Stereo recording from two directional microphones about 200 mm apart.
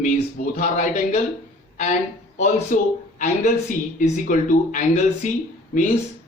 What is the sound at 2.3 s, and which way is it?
Speech, 40° left (ahead or behind).